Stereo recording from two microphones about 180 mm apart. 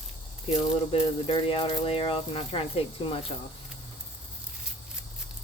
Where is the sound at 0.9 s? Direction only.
30° left (ahead or behind).